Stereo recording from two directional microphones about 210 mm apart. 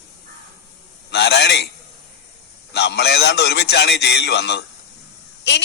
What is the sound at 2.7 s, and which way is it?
A man's voice, 50° left (ahead or behind).